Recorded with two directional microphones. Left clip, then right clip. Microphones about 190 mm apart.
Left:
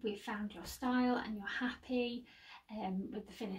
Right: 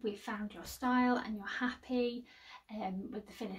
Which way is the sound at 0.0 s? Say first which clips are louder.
Right 1 dB; 15° right (ahead or behind).